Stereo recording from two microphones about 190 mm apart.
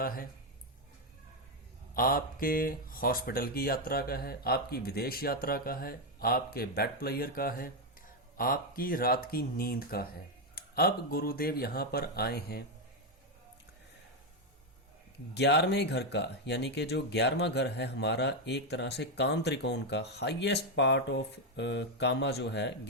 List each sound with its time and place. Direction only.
0.0 s speech: 50° left (ahead or behind)
2.0 s speech: 50° left (ahead or behind)
15.4 s speech: 60° left (ahead or behind)